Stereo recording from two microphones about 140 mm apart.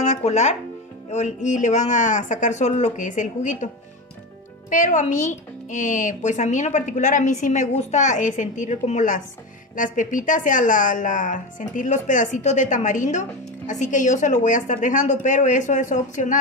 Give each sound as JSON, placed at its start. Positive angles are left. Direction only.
{"t": 0.0, "sound": "a woman's voice", "side_deg": 55}